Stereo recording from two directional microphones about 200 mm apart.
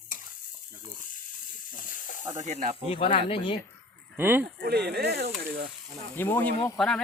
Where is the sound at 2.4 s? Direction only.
35° right (ahead or behind).